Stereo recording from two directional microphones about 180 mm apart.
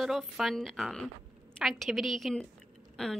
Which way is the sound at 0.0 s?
Centre (ahead or behind).